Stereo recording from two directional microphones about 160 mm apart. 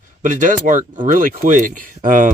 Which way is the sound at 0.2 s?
50° right (ahead or behind).